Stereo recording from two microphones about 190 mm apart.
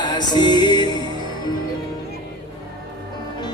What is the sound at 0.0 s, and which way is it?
Music, 25° left (ahead or behind).